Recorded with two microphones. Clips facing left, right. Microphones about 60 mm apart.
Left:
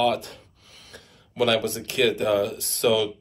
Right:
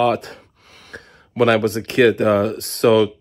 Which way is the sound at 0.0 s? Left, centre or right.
Right.